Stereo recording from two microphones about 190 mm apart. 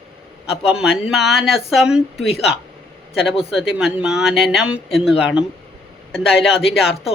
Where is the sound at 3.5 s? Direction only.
Centre (ahead or behind).